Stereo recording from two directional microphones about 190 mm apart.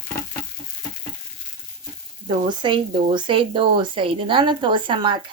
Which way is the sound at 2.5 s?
25° right (ahead or behind).